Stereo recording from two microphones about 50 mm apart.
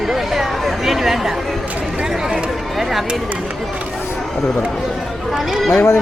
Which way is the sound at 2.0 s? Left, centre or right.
Centre.